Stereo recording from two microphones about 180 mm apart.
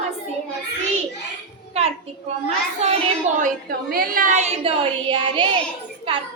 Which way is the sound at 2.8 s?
35° right (ahead or behind).